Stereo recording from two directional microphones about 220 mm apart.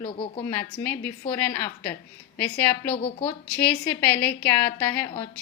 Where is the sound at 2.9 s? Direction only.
25° left (ahead or behind).